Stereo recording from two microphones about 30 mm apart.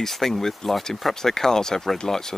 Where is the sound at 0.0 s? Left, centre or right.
Centre.